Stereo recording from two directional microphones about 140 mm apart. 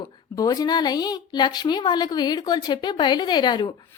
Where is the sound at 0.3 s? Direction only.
25° left (ahead or behind).